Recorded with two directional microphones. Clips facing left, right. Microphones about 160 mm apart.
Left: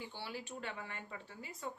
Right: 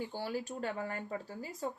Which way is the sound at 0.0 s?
45° right (ahead or behind).